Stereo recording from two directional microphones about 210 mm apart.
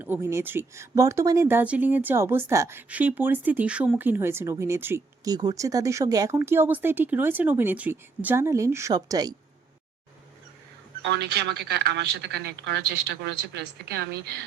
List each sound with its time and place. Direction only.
0.0 s speech: 10° right (ahead or behind)
11.0 s speech: 50° right (ahead or behind)